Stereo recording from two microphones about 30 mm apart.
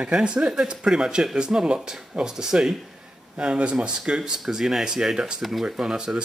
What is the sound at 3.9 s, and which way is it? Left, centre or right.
Speech, right.